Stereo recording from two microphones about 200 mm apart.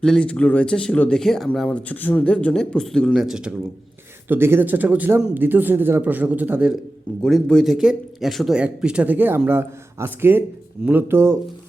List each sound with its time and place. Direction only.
0.0 s speech: 5° left (ahead or behind); by 11.3 s 10° right (ahead or behind)